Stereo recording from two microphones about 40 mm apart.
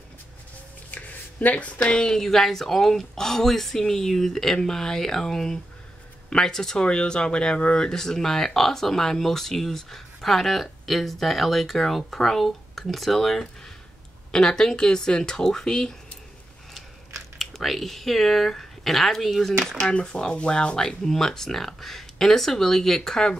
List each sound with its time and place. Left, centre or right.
0.9 s a sound: left
2.0 s speech: centre
7.7 s speech: centre
14.3 s speech: centre
17.4 s speech: centre
20.0 s speech: centre